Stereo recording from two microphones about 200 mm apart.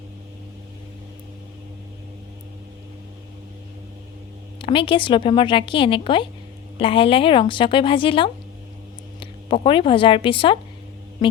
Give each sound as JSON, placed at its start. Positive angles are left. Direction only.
{"t": 4.6, "sound": "a woman's voice", "side_deg": 25}